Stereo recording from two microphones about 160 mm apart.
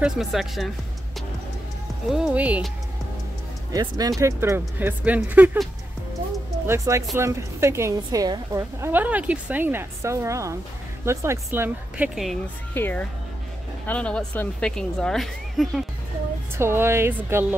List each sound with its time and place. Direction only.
0.0 s a woman's voice: centre (ahead or behind)
2.0 s a woman's voice: 5° right (ahead or behind)
3.7 s a woman's voice: 25° right (ahead or behind)
6.7 s a woman's voice: 20° right (ahead or behind)
12.7 s a woman's voice: 15° left (ahead or behind)
16.5 s a woman's voice: 15° right (ahead or behind)